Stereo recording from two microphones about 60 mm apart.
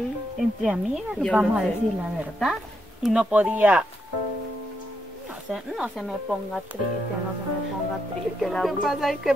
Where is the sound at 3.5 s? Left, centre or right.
Right.